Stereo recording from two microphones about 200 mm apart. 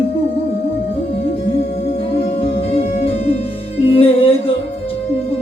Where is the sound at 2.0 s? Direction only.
25° left (ahead or behind).